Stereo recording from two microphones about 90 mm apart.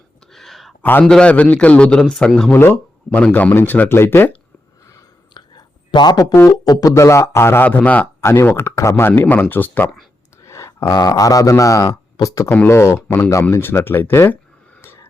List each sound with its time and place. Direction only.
0.3 s a sound: centre (ahead or behind)
0.8 s a man's voice: 20° left (ahead or behind)
1.0 s a man's voice: 10° left (ahead or behind)
2.5 s speech: 25° left (ahead or behind)
3.1 s a man's voice: 10° left (ahead or behind)
3.3 s speech: 20° left (ahead or behind)
5.3 s whispering: 55° left (ahead or behind)
6.7 s speech: 40° left (ahead or behind); by 8.0 s 15° left (ahead or behind)
8.2 s speech: 30° left (ahead or behind)
10.4 s a sound: 30° left (ahead or behind)
10.8 s speech: 50° left (ahead or behind); by 14.3 s 25° left (ahead or behind)
14.8 s a sound: 25° left (ahead or behind)